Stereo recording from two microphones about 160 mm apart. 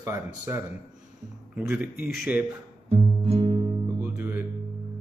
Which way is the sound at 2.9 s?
35° right (ahead or behind).